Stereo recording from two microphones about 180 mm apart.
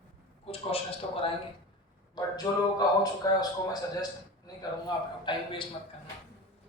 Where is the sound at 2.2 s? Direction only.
20° left (ahead or behind).